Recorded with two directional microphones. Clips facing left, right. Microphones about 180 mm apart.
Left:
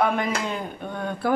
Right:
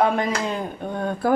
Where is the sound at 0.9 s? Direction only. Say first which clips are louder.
Right 3 dB; 45° right (ahead or behind).